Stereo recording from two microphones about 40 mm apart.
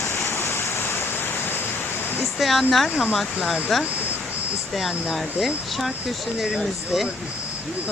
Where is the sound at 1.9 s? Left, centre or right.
Left.